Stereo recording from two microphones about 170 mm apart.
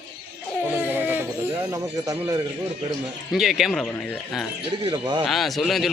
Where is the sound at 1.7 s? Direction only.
20° right (ahead or behind).